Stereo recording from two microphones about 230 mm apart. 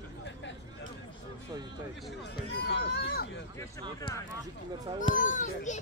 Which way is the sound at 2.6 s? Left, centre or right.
Left.